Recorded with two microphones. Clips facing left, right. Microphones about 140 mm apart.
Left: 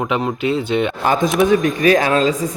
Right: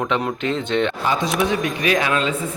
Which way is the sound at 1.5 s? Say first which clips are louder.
Left 7 dB; 40° left (ahead or behind).